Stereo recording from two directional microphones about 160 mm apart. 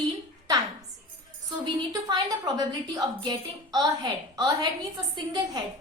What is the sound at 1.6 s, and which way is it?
A woman's voice, 25° right (ahead or behind).